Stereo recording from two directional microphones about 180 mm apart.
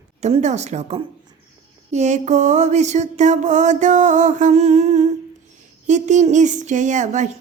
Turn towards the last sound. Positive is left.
turn(degrees=-40)  # may be behind; listen again after turning